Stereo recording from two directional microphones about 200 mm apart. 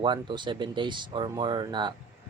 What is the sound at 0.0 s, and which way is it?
Speech, 25° right (ahead or behind).